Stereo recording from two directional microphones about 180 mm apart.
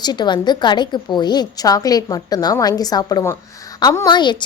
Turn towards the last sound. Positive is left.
turn(degrees=25)  # may be behind; listen again after turning